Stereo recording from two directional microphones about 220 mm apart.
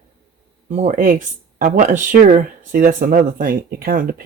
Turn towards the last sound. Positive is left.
turn(degrees=-40)  # may be behind; listen again after turning